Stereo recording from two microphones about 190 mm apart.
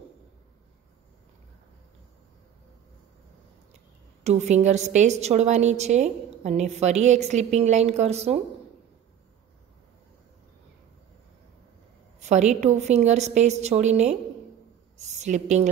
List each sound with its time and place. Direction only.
4.2 s a woman's voice: 35° right (ahead or behind)
12.2 s a woman's voice: 35° right (ahead or behind)